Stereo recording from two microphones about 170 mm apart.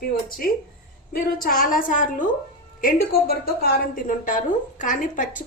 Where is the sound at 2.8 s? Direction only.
60° left (ahead or behind).